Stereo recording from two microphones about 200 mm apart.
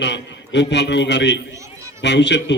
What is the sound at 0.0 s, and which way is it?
A man's voice, 60° left (ahead or behind).